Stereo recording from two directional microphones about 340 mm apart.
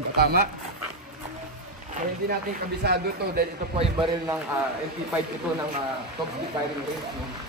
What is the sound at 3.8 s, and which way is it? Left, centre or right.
Speech, centre.